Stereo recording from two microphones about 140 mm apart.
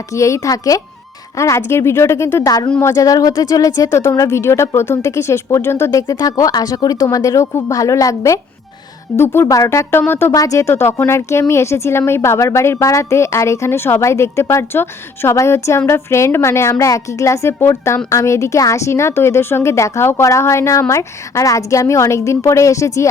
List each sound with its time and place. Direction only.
0.1 s a woman's voice: 20° left (ahead or behind)